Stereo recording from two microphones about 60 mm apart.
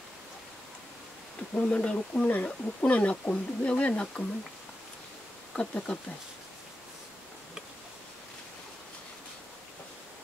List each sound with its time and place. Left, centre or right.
1.5 s speech: left
5.6 s speech: left